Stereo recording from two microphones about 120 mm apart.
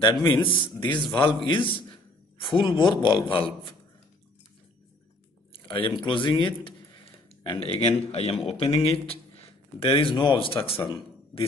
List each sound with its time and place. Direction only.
0.0 s a man's voice: 35° left (ahead or behind)
0.3 s a man's voice: 15° left (ahead or behind)
0.7 s a man's voice: 40° left (ahead or behind)
5.5 s speech: 45° left (ahead or behind)
7.6 s a man's voice: 45° left (ahead or behind)
8.1 s a man's voice: 60° left (ahead or behind); by 11.4 s 45° left (ahead or behind)